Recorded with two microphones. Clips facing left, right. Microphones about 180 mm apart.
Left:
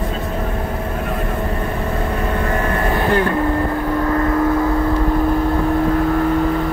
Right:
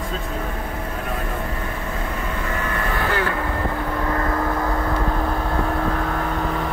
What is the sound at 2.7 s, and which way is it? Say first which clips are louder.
Vehicle: left 6 dB; 35° left (ahead or behind).